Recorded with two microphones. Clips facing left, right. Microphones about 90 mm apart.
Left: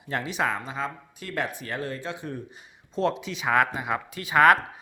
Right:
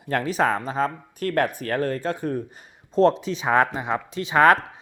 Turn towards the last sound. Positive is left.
turn(degrees=-30)  # may be behind; listen again after turning